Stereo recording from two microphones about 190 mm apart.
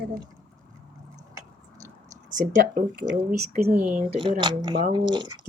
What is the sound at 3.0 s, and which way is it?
Speech, 20° right (ahead or behind).